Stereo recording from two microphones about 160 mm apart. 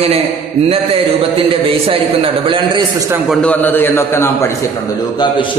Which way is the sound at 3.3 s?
10° left (ahead or behind).